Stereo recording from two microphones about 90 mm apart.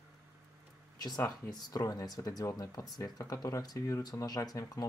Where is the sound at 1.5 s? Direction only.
45° left (ahead or behind).